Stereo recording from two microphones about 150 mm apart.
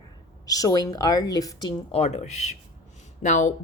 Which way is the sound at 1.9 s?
45° left (ahead or behind).